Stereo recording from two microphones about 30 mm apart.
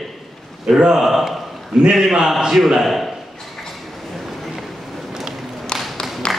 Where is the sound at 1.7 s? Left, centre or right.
Right.